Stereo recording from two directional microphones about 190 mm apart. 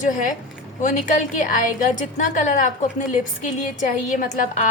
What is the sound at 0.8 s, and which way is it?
A woman's voice, 40° left (ahead or behind).